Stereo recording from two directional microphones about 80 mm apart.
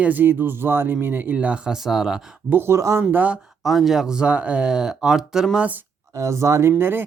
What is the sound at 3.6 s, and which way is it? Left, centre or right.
Speech, centre.